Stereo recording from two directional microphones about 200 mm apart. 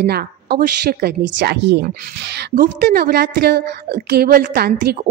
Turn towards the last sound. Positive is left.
turn(degrees=-50)  # may be behind; listen again after turning